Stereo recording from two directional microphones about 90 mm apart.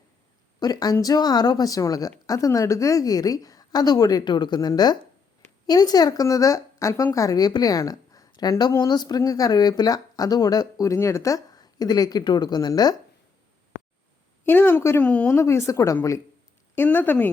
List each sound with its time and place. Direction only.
0.6 s speech: 50° left (ahead or behind)
14.4 s a woman's voice: 25° left (ahead or behind)
15.0 s speech: 15° left (ahead or behind)
15.4 s a woman's voice: 35° left (ahead or behind)
16.7 s a woman's voice: 25° left (ahead or behind)